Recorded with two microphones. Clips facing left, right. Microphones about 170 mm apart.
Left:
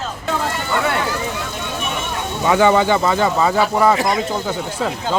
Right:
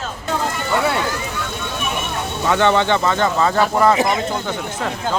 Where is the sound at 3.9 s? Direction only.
20° right (ahead or behind).